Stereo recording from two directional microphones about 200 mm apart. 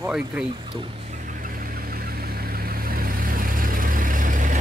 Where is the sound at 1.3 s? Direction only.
45° right (ahead or behind).